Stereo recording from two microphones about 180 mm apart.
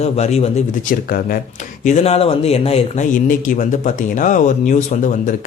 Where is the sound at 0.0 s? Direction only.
35° left (ahead or behind).